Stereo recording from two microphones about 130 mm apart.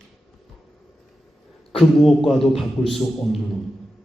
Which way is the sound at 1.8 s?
Centre (ahead or behind).